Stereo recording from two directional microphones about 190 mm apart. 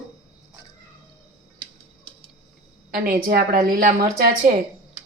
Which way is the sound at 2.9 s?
50° right (ahead or behind).